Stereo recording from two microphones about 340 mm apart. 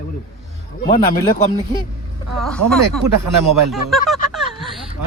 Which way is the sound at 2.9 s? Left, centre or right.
Right.